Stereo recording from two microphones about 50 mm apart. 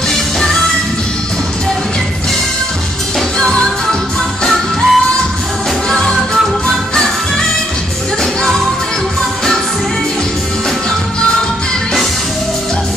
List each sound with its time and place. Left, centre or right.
3.3 s music: centre
4.5 s music: centre
8.2 s music: centre